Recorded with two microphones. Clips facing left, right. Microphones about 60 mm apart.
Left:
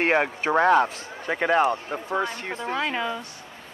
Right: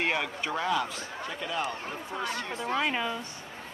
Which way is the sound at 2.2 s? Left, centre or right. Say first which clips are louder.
Left 2 dB; left.